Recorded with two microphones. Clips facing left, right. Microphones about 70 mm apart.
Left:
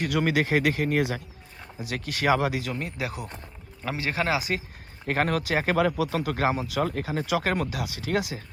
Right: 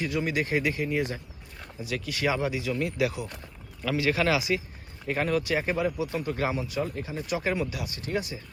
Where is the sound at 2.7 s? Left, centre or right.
Left.